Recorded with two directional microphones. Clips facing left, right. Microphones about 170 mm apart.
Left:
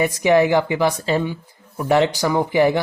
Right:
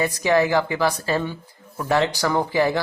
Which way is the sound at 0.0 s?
20° left (ahead or behind).